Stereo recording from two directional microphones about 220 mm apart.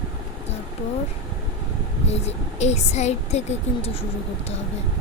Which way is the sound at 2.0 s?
30° left (ahead or behind).